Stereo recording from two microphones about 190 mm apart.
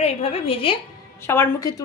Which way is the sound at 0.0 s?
30° left (ahead or behind).